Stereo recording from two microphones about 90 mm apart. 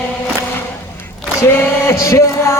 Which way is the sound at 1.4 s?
30° left (ahead or behind).